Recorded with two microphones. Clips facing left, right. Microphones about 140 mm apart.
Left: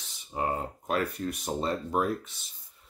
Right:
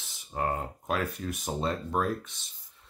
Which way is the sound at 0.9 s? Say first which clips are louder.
Left 2 dB; centre (ahead or behind).